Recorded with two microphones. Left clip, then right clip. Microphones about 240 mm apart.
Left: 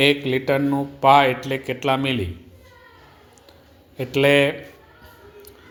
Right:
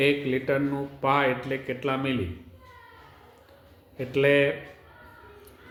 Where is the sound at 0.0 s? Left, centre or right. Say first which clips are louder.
Left 6 dB; left.